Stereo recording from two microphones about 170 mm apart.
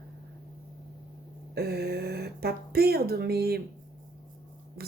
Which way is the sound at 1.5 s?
70° right (ahead or behind).